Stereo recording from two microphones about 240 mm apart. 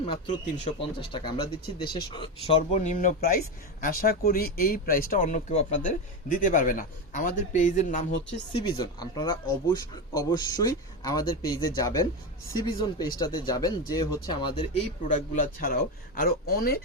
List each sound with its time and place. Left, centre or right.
0.7 s speech: left
2.5 s a man's voice: left
8.6 s a man's voice: centre; by 16.8 s left